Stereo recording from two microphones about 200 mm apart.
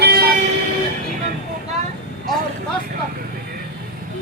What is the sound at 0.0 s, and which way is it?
Vehicle, 50° right (ahead or behind).